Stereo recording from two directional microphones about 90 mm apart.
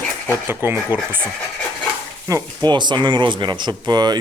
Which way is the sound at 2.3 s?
40° right (ahead or behind).